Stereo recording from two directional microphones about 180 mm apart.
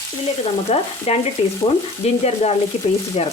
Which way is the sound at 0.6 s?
35° left (ahead or behind).